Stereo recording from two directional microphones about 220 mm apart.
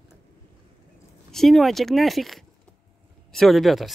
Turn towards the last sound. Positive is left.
turn(degrees=0)  # may be behind; listen again after turning